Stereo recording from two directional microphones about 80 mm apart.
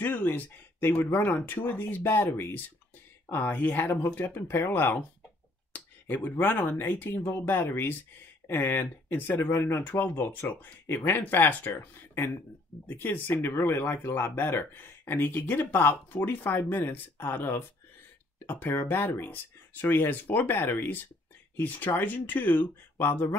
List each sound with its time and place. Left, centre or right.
0.0 s speech: left
6.0 s speech: left